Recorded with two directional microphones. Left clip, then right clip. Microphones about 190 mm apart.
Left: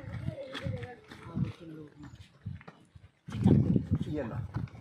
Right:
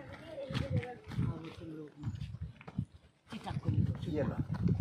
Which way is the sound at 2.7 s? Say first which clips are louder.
Right 10 dB; 15° right (ahead or behind).